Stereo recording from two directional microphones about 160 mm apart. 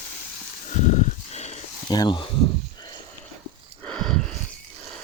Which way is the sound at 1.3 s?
45° left (ahead or behind).